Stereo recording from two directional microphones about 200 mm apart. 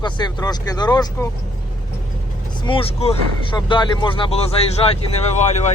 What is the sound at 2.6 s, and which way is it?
Speech, 25° left (ahead or behind).